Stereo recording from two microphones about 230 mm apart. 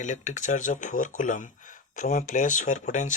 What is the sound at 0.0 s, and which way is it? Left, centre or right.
Speech, left.